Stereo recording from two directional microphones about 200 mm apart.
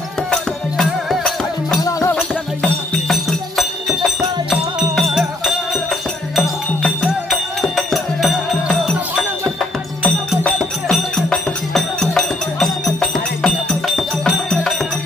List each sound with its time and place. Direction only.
0.3 s music: centre (ahead or behind)
1.8 s music: 15° left (ahead or behind)
2.1 s music: centre (ahead or behind)
10.0 s music: 5° left (ahead or behind)